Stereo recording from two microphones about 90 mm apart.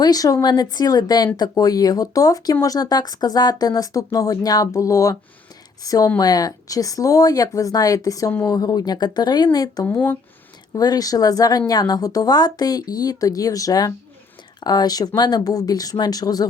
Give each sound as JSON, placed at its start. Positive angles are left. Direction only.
{"t": 0.0, "sound": "speech", "side_deg": 45}
{"t": 9.8, "sound": "speech", "side_deg": 25}
{"t": 10.8, "sound": "speech", "side_deg": 45}